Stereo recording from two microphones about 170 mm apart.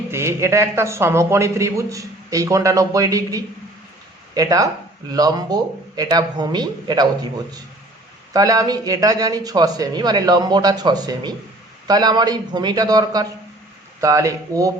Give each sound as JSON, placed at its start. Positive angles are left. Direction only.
{"t": 0.1, "sound": "a man's voice", "side_deg": -15}
{"t": 8.3, "sound": "speech", "side_deg": -20}